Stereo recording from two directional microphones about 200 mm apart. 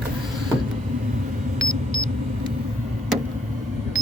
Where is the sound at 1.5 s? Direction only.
70° right (ahead or behind).